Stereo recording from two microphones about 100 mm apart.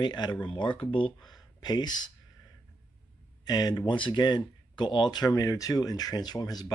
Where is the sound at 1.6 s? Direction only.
45° left (ahead or behind).